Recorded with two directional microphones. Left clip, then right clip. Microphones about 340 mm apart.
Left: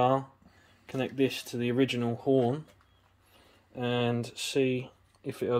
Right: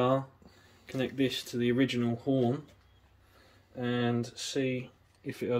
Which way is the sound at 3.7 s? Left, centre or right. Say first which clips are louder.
Left 2 dB; left.